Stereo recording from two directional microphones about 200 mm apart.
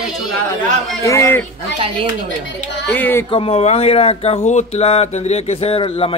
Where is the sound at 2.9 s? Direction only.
10° left (ahead or behind).